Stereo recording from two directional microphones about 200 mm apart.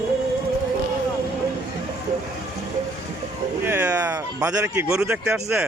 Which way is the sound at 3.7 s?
10° right (ahead or behind).